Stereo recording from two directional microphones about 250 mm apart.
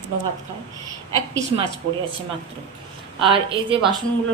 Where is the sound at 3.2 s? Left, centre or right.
Right.